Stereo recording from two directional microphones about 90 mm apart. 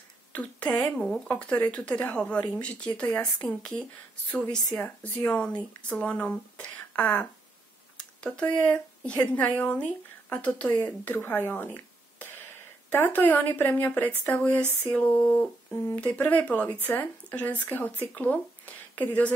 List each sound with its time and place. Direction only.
0.3 s speech: 15° left (ahead or behind)
0.9 s speech: 5° left (ahead or behind)
8.0 s a sound: 10° left (ahead or behind)
8.6 s speech: 15° left (ahead or behind)